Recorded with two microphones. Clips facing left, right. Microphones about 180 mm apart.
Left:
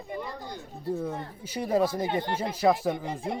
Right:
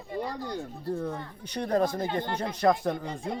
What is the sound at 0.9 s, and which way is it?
A man's voice, 5° left (ahead or behind).